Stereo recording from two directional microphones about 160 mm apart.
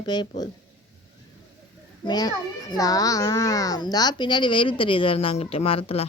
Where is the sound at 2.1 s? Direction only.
25° left (ahead or behind).